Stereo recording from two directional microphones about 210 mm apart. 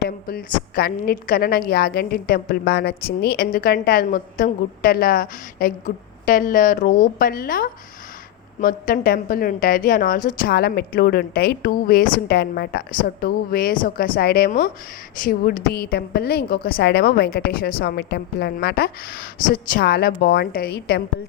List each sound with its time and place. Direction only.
0.0 s a woman's voice: 45° left (ahead or behind)